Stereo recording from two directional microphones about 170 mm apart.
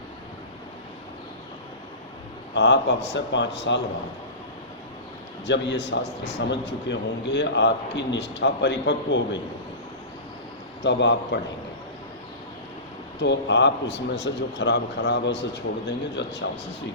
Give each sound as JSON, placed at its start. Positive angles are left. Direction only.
{"t": 2.6, "sound": "a man's voice", "side_deg": 90}
{"t": 5.5, "sound": "a man's voice", "side_deg": 90}
{"t": 10.8, "sound": "a man's voice", "side_deg": 90}
{"t": 13.1, "sound": "a man's voice", "side_deg": 90}